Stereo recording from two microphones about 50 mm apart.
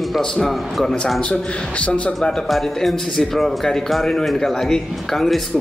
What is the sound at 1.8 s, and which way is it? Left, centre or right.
Speech, left.